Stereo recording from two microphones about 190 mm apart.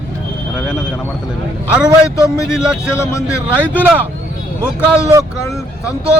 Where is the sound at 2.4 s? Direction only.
5° right (ahead or behind).